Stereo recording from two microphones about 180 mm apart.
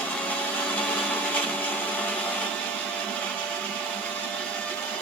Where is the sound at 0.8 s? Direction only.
10° left (ahead or behind).